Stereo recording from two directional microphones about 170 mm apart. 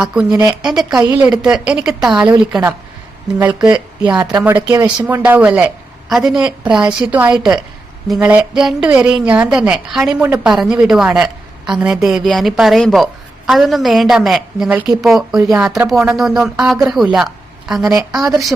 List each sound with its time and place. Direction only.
0.0 s a woman's voice: 5° right (ahead or behind)
4.2 s a woman's voice: 25° right (ahead or behind); by 18.3 s 5° right (ahead or behind)